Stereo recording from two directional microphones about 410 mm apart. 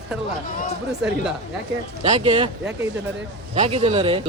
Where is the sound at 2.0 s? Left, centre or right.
Centre.